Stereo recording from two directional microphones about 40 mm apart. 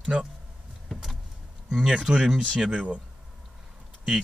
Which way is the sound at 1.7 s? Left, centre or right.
Centre.